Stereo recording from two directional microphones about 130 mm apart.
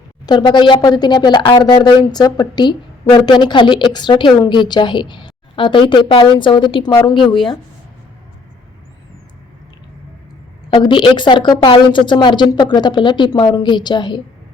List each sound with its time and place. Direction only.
0.3 s speech: 35° left (ahead or behind)
10.8 s speech: 40° left (ahead or behind)